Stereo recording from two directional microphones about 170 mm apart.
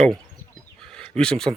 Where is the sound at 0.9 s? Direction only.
5° left (ahead or behind).